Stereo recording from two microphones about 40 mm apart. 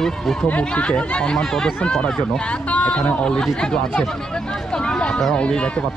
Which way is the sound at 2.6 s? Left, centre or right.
Left.